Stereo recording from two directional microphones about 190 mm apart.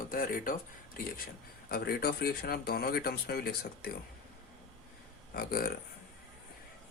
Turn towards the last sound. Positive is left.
turn(degrees=50)  # may be behind; listen again after turning